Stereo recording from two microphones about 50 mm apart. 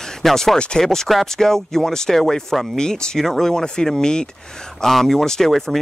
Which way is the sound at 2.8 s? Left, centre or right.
Centre.